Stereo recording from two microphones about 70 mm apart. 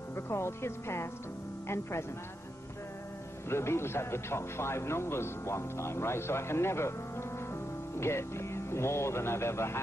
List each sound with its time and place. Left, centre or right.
0.1 s speech: left
3.4 s speech: left